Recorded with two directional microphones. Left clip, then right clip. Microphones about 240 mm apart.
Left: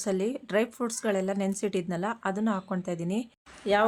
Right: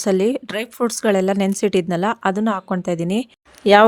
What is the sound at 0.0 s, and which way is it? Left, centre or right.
A woman's voice, right.